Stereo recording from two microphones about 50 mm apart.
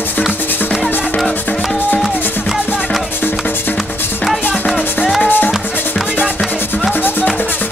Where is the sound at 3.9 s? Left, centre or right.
Left.